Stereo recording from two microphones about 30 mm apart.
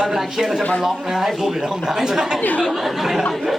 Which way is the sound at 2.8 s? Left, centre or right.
Centre.